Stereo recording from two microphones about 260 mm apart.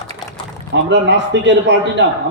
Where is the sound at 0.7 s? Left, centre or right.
Right.